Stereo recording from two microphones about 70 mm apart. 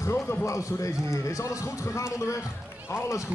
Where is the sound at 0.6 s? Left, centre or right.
Left.